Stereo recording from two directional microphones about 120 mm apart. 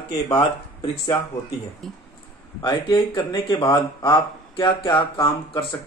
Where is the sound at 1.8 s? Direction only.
5° left (ahead or behind).